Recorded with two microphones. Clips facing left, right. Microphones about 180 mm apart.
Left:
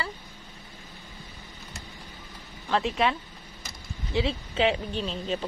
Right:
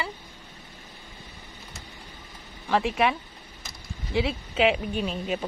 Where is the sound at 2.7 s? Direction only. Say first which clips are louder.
Right 2 dB; 10° right (ahead or behind).